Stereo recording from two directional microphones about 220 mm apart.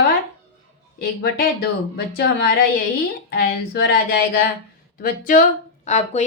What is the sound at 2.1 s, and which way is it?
A woman's voice, 45° left (ahead or behind).